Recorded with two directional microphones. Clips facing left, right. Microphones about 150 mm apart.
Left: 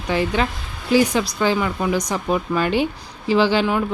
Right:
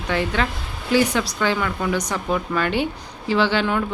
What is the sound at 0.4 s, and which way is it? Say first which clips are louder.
Speech: left 1 dB; 15° left (ahead or behind).